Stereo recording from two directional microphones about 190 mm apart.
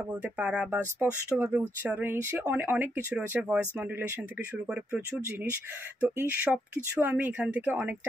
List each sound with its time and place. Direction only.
0.1 s speech: 5° right (ahead or behind)
4.6 s speech: 10° right (ahead or behind)